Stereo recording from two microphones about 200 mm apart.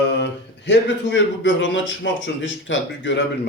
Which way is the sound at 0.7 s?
65° left (ahead or behind).